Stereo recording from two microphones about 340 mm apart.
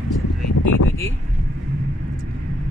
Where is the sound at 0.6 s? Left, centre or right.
Left.